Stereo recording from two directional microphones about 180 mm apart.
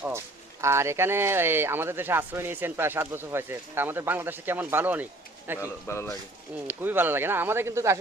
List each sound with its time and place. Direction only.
0.6 s speech: 15° right (ahead or behind)
5.5 s a man's voice: 15° left (ahead or behind)
6.7 s speech: 10° right (ahead or behind)